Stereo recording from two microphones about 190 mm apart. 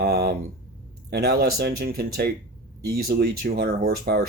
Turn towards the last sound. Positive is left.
turn(degrees=-55)  # may be behind; listen again after turning